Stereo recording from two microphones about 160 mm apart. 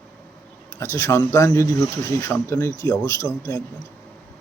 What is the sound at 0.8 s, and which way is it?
Speech, 20° left (ahead or behind).